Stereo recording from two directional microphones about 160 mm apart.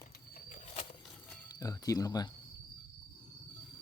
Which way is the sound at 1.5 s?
20° left (ahead or behind).